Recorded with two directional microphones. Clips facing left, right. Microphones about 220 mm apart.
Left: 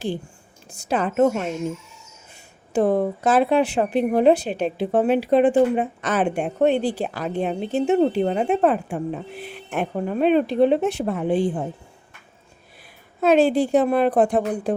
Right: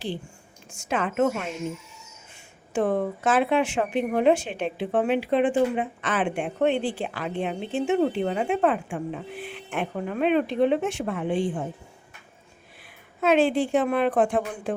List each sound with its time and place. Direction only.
0.7 s a woman's voice: 35° left (ahead or behind)
2.7 s a woman's voice: 35° left (ahead or behind)
13.2 s a woman's voice: 40° left (ahead or behind)